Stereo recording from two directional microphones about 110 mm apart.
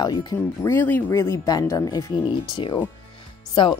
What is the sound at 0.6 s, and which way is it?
A woman's voice, 20° left (ahead or behind).